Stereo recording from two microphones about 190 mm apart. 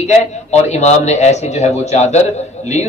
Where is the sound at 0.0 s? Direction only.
35° left (ahead or behind).